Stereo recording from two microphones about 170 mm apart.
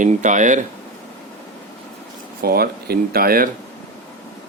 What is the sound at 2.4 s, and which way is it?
Speech, 65° right (ahead or behind).